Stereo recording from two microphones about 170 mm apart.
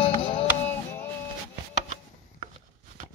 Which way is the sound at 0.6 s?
15° left (ahead or behind).